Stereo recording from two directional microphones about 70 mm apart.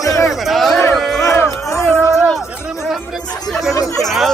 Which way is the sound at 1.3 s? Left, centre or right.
Left.